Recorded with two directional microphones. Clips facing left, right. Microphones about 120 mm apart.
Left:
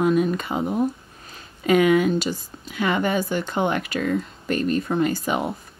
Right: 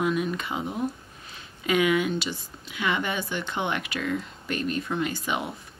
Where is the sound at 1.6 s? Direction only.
45° left (ahead or behind).